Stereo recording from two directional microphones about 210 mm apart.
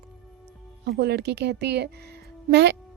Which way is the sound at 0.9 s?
50° right (ahead or behind).